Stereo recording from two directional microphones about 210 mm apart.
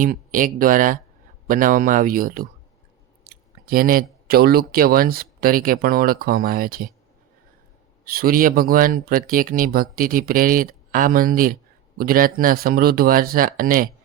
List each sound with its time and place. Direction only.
0.0 s speech: 40° right (ahead or behind)
8.0 s speech: 45° right (ahead or behind)